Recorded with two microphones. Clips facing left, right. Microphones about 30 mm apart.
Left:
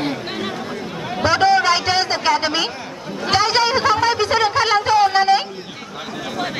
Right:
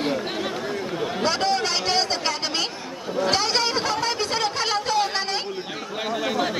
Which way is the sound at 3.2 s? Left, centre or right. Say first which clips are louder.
Left 5 dB; centre.